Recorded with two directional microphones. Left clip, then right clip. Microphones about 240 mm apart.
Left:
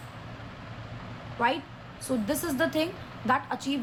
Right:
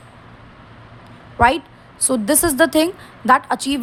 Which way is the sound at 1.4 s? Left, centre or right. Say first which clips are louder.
Right 12 dB; right.